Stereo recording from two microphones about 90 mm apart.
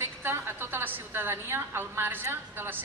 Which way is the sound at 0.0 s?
30° right (ahead or behind).